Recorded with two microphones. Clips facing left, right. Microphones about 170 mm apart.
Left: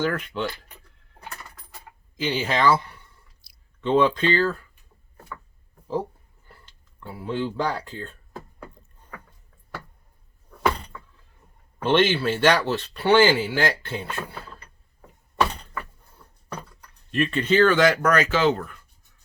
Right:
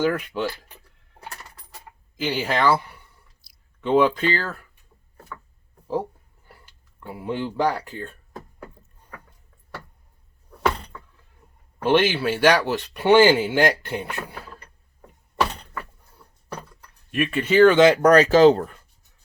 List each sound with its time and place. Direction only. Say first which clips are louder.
0.0 s speech: right 3 dB; 10° right (ahead or behind)
2.1 s speech: right 1 dB; 5° right (ahead or behind)
3.4 s a sound: left 1 dB; centre (ahead or behind)
3.8 s speech: right 1 dB; 10° right (ahead or behind)
6.5 s speech: right 1 dB; 10° right (ahead or behind)
11.8 s speech: right 1 dB; 10° right (ahead or behind)
17.1 s speech: even; 10° right (ahead or behind)
17.7 s speech: right 5 dB; 25° right (ahead or behind)